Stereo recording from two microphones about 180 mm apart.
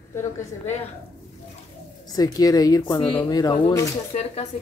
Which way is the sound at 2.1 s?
20° left (ahead or behind).